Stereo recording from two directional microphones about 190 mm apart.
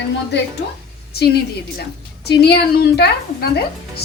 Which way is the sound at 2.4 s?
60° left (ahead or behind).